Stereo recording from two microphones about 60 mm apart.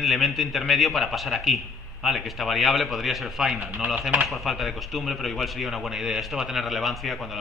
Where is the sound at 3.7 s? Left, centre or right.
Right.